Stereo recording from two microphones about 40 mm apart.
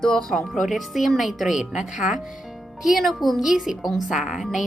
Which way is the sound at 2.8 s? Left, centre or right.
Centre.